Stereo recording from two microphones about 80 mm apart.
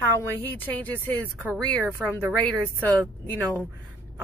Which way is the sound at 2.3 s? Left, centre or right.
Centre.